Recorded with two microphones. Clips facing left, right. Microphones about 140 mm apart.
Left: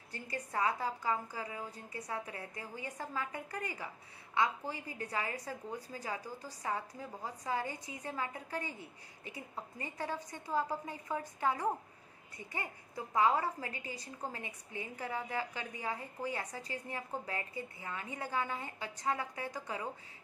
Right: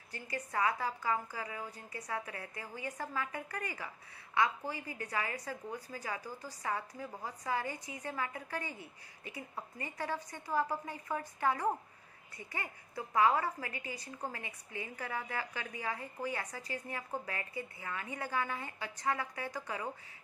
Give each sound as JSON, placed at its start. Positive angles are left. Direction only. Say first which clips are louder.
{"t": 0.1, "sound": "a woman's voice", "louder": "even", "side_deg": 25}
{"t": 7.4, "sound": "a woman's voice", "louder": "right 1 dB", "side_deg": 20}